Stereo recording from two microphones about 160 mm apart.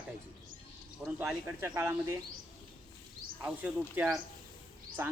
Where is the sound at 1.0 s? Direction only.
5° right (ahead or behind).